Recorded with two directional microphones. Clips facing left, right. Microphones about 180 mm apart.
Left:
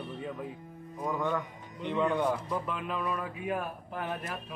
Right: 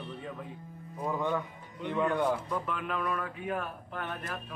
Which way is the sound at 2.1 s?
5° right (ahead or behind).